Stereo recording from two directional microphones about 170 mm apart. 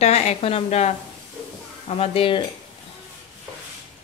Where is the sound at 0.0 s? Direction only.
40° left (ahead or behind).